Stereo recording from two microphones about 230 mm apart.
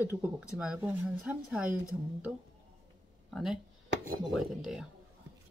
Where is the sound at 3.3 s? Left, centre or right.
Centre.